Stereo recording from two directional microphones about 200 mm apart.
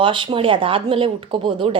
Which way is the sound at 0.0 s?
25° right (ahead or behind).